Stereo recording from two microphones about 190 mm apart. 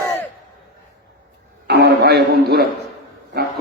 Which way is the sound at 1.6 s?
60° right (ahead or behind).